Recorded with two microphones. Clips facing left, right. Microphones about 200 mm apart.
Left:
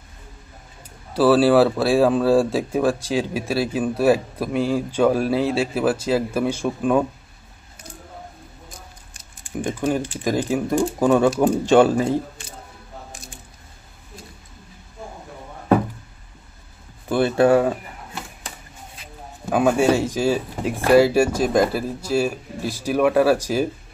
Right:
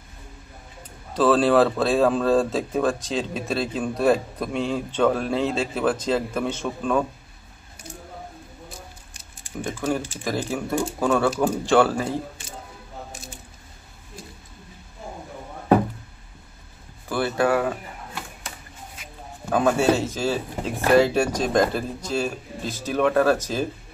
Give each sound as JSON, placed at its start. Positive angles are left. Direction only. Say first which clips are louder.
{"t": 1.1, "sound": "speech", "louder": "left 3 dB", "side_deg": 10}
{"t": 9.6, "sound": "speech", "louder": "left 3 dB", "side_deg": 15}
{"t": 17.1, "sound": "speech", "louder": "left 6 dB", "side_deg": 25}
{"t": 19.5, "sound": "speech", "louder": "left 2 dB", "side_deg": 10}